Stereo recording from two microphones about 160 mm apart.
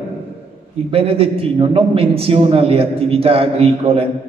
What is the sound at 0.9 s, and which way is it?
A man's voice, 35° right (ahead or behind).